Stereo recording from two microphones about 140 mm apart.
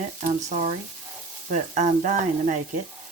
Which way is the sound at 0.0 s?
60° right (ahead or behind).